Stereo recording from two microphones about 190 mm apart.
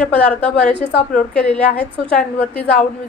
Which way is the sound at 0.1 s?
10° left (ahead or behind).